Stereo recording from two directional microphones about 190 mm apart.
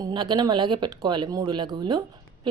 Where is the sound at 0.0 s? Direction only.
25° right (ahead or behind).